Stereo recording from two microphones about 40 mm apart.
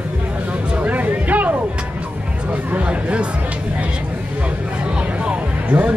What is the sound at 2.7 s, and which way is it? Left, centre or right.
Speech, right.